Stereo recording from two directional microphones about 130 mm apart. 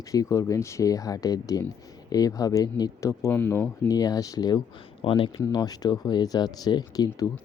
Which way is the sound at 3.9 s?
30° left (ahead or behind).